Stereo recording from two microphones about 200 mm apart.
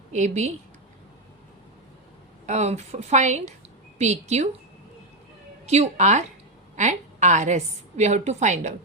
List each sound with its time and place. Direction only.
0.1 s a woman's voice: 35° right (ahead or behind)
2.5 s a woman's voice: 35° right (ahead or behind)
5.6 s a woman's voice: 35° right (ahead or behind)